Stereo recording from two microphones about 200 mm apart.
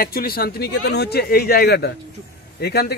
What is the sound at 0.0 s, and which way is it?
Speech, 50° left (ahead or behind).